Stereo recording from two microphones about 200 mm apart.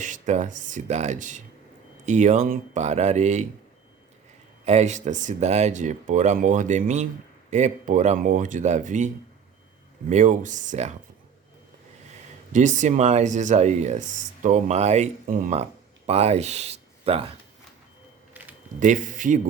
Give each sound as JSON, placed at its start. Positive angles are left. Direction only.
{"t": 0.0, "sound": "speech", "side_deg": -40}
{"t": 4.6, "sound": "speech", "side_deg": -35}
{"t": 12.5, "sound": "speech", "side_deg": -35}
{"t": 18.8, "sound": "speech", "side_deg": -40}